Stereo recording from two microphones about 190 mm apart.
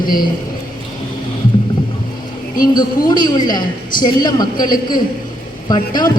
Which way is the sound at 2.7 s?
20° left (ahead or behind).